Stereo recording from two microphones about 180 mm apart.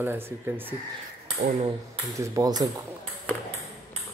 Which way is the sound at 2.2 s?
20° right (ahead or behind).